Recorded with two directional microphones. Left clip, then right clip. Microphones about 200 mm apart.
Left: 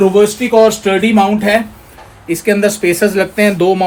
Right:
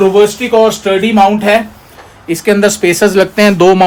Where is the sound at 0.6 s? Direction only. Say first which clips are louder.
Right 1 dB; 10° left (ahead or behind).